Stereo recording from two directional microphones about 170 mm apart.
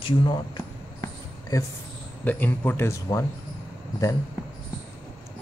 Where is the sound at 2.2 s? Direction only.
10° left (ahead or behind).